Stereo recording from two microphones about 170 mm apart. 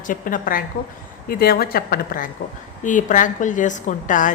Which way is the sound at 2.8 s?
50° left (ahead or behind).